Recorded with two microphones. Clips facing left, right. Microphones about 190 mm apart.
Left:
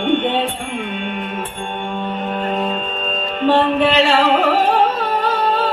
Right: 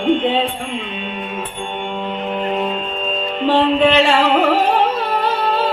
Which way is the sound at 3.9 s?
35° left (ahead or behind).